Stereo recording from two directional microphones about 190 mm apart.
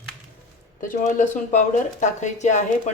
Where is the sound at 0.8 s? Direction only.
45° left (ahead or behind).